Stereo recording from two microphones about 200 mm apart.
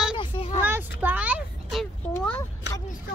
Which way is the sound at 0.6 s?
10° right (ahead or behind).